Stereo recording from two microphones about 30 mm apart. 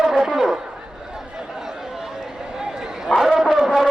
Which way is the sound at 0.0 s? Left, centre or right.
Centre.